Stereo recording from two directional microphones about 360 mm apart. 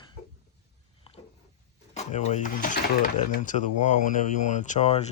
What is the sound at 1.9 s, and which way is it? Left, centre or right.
Speech, centre.